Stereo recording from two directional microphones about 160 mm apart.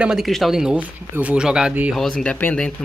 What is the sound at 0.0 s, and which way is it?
Speech, centre (ahead or behind).